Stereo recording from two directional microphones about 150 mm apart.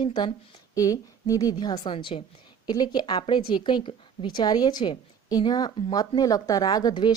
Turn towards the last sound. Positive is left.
turn(degrees=25)  # may be behind; listen again after turning